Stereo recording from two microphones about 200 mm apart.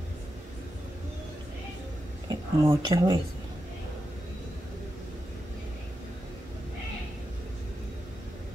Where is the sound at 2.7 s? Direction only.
20° right (ahead or behind).